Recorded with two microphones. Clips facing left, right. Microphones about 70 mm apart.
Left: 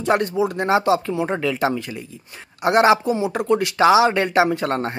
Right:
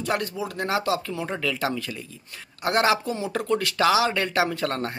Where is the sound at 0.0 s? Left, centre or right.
Left.